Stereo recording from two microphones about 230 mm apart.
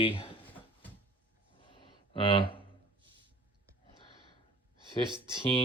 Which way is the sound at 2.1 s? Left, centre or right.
Left.